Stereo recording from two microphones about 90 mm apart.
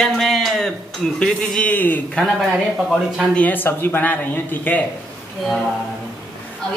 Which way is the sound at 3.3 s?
20° left (ahead or behind).